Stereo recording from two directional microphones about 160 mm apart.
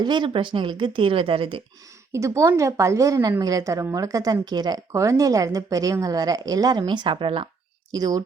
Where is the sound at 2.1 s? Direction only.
20° right (ahead or behind).